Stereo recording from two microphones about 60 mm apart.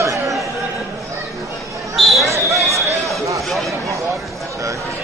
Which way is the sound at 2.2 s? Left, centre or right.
Right.